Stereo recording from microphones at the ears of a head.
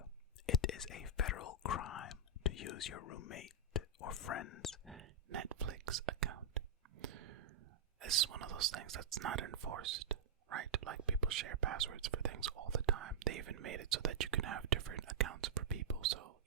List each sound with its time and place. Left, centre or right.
0.4 s whispering: left
4.9 s whispering: right
7.0 s a sound: right
7.9 s speech: right